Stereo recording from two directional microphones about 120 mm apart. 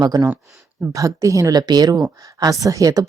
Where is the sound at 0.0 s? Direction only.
30° right (ahead or behind).